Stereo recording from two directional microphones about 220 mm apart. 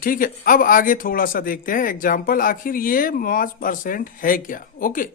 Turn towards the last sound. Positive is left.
turn(degrees=40)  # may be behind; listen again after turning